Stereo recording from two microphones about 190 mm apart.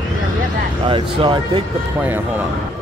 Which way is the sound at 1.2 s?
25° right (ahead or behind).